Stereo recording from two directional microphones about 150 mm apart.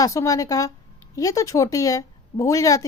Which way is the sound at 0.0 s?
20° left (ahead or behind).